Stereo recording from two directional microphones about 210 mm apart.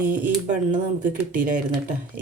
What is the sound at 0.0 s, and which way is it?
Speech, 40° right (ahead or behind).